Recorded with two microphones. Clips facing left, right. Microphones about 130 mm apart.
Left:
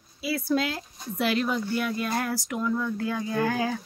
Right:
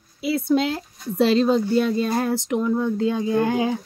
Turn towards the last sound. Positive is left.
turn(degrees=-20)  # may be behind; listen again after turning